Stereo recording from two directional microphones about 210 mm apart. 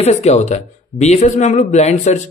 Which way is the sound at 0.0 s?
30° left (ahead or behind).